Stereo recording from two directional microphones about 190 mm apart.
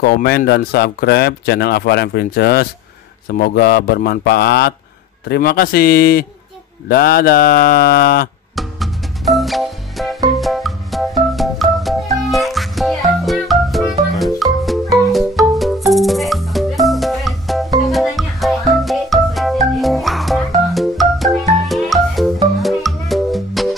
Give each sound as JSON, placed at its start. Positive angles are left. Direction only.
{"t": 0.0, "sound": "speech", "side_deg": 55}
{"t": 8.5, "sound": "music", "side_deg": 0}